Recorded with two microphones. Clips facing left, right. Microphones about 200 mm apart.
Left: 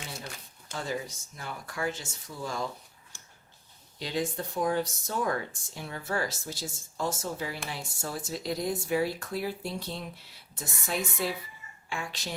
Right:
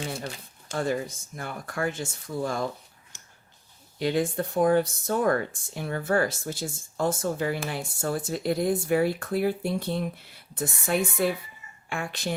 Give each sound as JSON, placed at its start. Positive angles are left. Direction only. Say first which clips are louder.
{"t": 0.7, "sound": "speech", "louder": "right 7 dB", "side_deg": -55}
{"t": 3.1, "sound": "a sound", "louder": "even", "side_deg": -20}
{"t": 3.9, "sound": "speech", "louder": "right 7 dB", "side_deg": -55}